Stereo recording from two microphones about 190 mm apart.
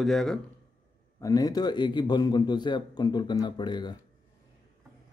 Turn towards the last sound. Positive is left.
turn(degrees=25)  # may be behind; listen again after turning